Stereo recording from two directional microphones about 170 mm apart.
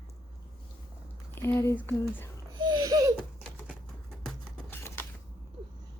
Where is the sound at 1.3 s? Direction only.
15° left (ahead or behind).